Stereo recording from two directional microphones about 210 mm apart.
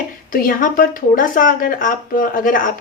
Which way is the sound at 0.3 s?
40° left (ahead or behind).